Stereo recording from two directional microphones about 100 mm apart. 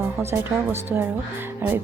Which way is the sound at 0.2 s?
25° right (ahead or behind).